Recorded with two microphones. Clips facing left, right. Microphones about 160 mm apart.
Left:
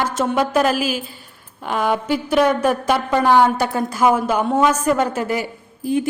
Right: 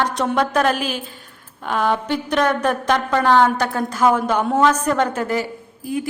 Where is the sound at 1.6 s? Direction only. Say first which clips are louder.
Even; 10° left (ahead or behind).